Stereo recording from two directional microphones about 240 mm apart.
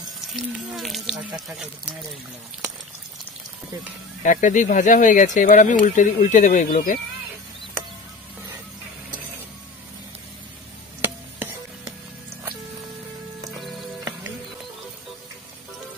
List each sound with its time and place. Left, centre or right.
0.3 s speech: centre
4.2 s speech: left